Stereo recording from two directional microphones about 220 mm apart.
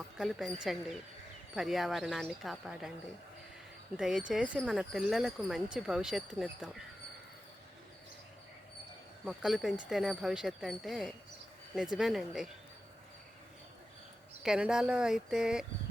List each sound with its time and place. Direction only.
0.2 s speech: centre (ahead or behind)
3.9 s speech: centre (ahead or behind)
9.2 s speech: centre (ahead or behind)
14.4 s speech: 5° right (ahead or behind)